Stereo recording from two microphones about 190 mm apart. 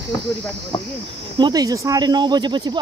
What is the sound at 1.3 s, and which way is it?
Speech, 20° right (ahead or behind).